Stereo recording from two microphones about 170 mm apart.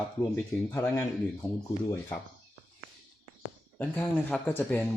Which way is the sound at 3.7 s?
10° left (ahead or behind).